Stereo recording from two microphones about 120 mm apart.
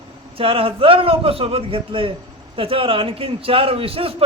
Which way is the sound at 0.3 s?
50° right (ahead or behind).